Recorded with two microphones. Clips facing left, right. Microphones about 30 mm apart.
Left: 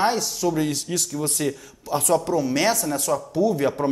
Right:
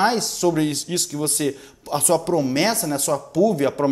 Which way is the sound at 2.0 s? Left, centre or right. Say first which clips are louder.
Right 1 dB; right.